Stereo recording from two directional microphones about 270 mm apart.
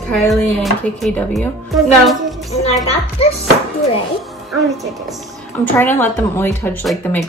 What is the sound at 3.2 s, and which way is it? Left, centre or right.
Music, left.